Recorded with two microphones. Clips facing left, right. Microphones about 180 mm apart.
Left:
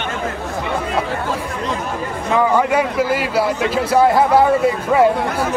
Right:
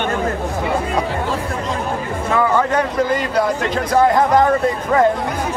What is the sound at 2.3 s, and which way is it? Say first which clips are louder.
A man's voice: left 1 dB; 10° left (ahead or behind).